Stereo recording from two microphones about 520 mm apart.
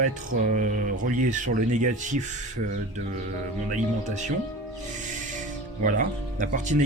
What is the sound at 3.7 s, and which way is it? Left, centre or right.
Speech, centre.